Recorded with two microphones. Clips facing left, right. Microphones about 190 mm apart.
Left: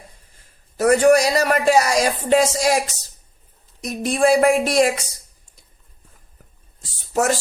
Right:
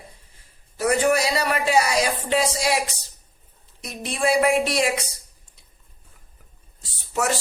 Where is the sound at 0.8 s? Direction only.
45° left (ahead or behind).